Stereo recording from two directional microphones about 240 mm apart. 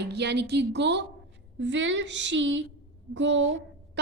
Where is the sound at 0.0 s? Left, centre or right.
Right.